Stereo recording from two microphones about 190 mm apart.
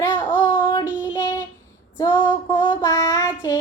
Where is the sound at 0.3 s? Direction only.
25° left (ahead or behind).